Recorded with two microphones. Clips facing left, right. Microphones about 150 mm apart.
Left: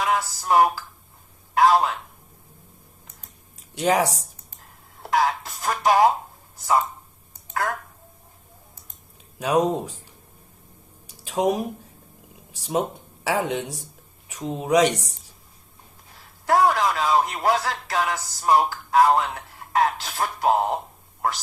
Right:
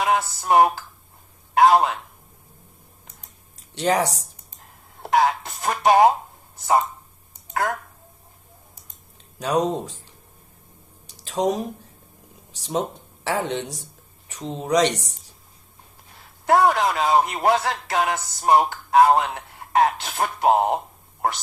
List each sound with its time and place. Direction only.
0.0 s a man's voice: 25° right (ahead or behind)
3.8 s speech: 10° left (ahead or behind)
5.0 s a man's voice: 25° right (ahead or behind)
9.4 s speech: 10° left (ahead or behind)
11.0 s speech: 10° left (ahead or behind)
16.5 s a man's voice: 25° right (ahead or behind)